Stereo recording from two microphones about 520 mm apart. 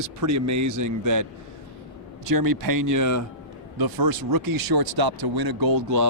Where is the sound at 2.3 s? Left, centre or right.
Right.